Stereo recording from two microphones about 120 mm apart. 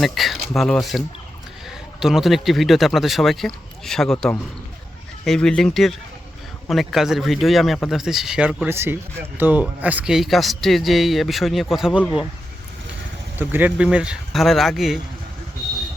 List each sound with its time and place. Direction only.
0.0 s speech: centre (ahead or behind)
8.7 s speech: 20° right (ahead or behind); by 12.0 s 5° right (ahead or behind)
13.4 s speech: 15° right (ahead or behind)